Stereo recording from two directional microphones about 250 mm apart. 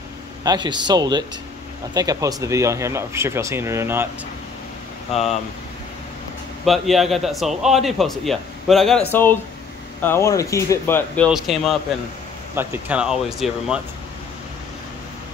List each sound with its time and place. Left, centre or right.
0.4 s speech: centre
5.1 s speech: left
6.6 s a man's voice: centre
11.3 s a man's voice: centre